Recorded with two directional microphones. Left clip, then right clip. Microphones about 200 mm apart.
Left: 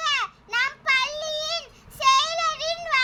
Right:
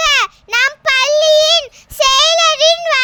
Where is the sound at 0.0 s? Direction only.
60° right (ahead or behind).